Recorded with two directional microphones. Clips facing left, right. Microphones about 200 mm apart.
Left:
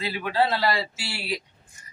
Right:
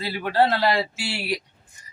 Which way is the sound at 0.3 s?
55° right (ahead or behind).